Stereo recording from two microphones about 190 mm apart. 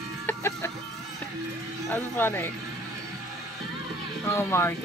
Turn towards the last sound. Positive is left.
turn(degrees=10)  # may be behind; listen again after turning